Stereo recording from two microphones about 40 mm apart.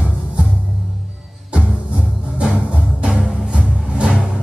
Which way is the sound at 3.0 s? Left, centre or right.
Right.